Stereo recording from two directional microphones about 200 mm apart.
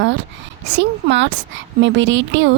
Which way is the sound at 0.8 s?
65° right (ahead or behind).